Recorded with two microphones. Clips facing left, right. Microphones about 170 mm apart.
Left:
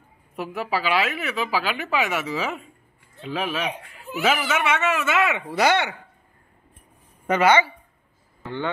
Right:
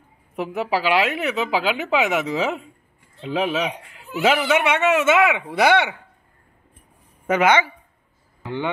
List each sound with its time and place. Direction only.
0.4 s speech: 20° right (ahead or behind)
7.2 s speech: 15° right (ahead or behind)